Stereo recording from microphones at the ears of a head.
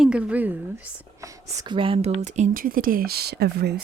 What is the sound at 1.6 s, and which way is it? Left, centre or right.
Speech, right.